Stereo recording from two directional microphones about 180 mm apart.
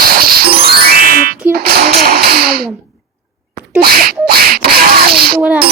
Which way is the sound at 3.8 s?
60° right (ahead or behind).